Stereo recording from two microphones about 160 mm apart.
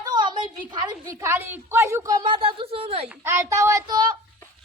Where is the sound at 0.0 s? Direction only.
25° right (ahead or behind).